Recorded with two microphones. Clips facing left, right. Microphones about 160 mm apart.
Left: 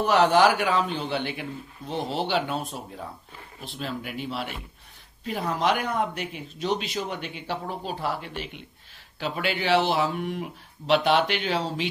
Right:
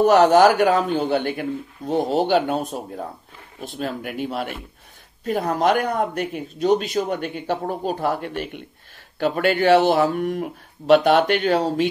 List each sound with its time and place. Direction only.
0.0 s speech: 45° right (ahead or behind)